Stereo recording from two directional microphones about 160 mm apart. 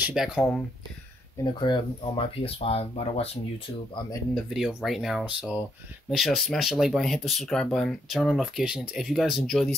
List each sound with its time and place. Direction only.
0.0 s speech: 5° right (ahead or behind)
1.4 s speech: 30° left (ahead or behind)
4.6 s speech: 5° right (ahead or behind)